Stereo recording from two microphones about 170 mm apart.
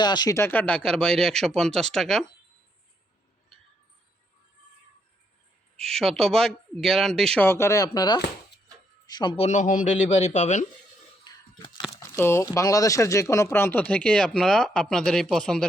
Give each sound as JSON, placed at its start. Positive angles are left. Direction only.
{"t": 0.0, "sound": "speech", "side_deg": 25}
{"t": 5.8, "sound": "a man's voice", "side_deg": 5}
{"t": 11.2, "sound": "a sound", "side_deg": 25}
{"t": 11.9, "sound": "speech", "side_deg": 15}